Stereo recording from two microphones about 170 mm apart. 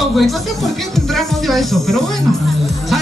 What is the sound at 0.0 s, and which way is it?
Music, centre (ahead or behind).